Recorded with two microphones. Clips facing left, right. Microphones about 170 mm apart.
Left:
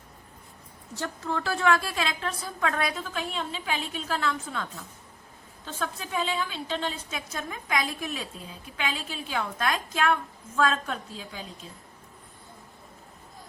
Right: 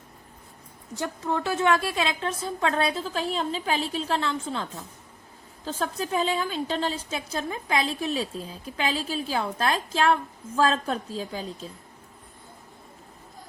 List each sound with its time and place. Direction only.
0.9 s a woman's voice: 20° right (ahead or behind); by 11.4 s 35° right (ahead or behind)